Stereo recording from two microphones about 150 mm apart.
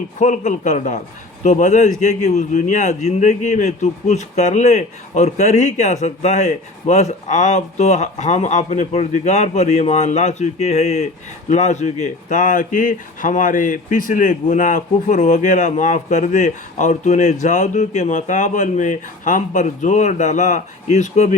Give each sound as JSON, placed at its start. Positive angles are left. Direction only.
{"t": 0.2, "sound": "speech", "side_deg": 55}